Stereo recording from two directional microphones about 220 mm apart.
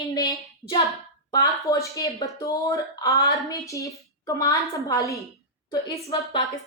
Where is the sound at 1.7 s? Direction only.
15° left (ahead or behind).